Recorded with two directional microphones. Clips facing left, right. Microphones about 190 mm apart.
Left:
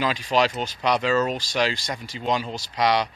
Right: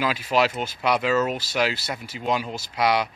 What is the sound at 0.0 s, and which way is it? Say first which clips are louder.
Speech: even; 5° right (ahead or behind).